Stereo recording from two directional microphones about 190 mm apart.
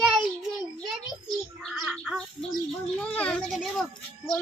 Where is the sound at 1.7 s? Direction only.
Centre (ahead or behind).